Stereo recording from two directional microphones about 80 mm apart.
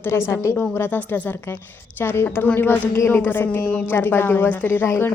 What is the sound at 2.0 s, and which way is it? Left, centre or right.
A woman's voice, left.